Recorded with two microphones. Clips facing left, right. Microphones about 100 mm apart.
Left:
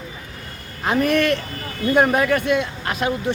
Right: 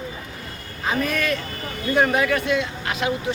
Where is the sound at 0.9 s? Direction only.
60° left (ahead or behind).